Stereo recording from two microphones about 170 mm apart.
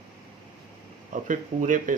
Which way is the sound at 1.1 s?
50° right (ahead or behind).